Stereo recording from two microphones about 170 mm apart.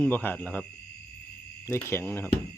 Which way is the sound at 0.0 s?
10° left (ahead or behind).